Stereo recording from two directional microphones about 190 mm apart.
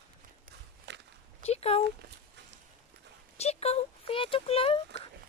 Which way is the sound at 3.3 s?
35° left (ahead or behind).